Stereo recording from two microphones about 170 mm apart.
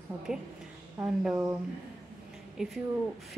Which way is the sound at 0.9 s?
5° right (ahead or behind).